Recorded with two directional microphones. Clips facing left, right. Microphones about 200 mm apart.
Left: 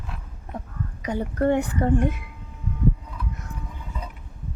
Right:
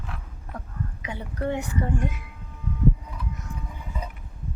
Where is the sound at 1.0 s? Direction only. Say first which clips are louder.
Left 9 dB; 45° left (ahead or behind).